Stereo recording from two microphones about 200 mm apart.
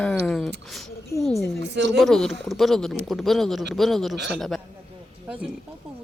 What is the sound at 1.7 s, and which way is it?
Speech, 60° right (ahead or behind).